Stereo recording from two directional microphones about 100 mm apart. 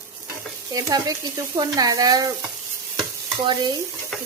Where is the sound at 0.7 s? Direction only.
40° right (ahead or behind).